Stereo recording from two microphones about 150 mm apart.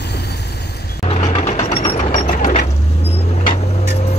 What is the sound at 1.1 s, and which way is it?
Mechanisms, 50° left (ahead or behind).